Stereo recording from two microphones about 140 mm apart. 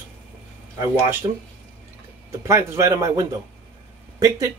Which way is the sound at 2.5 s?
20° right (ahead or behind).